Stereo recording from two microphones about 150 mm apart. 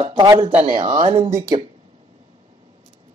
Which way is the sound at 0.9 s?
50° right (ahead or behind).